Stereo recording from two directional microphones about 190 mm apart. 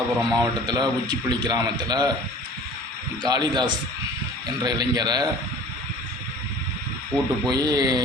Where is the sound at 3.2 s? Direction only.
25° right (ahead or behind).